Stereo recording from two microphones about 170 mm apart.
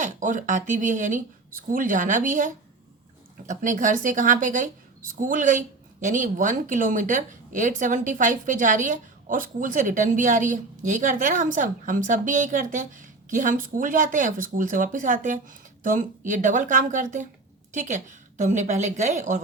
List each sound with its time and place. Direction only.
0.0 s a woman's voice: 45° right (ahead or behind)